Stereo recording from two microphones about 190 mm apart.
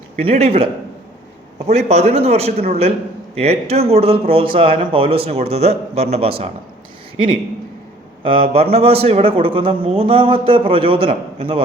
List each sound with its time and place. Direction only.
0.2 s speech: 30° right (ahead or behind)
8.2 s a man's voice: 30° right (ahead or behind)